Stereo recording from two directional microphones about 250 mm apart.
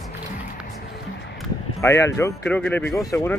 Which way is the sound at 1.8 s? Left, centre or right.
Centre.